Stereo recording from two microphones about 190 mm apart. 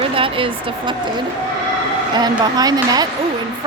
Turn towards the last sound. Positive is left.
turn(degrees=-20)  # may be behind; listen again after turning